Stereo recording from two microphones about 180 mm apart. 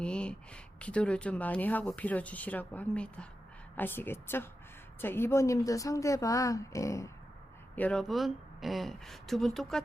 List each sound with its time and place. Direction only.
0.0 s speech: 5° left (ahead or behind)
7.8 s speech: 5° left (ahead or behind)